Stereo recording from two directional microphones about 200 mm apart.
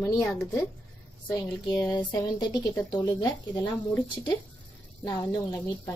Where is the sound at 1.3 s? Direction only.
15° left (ahead or behind).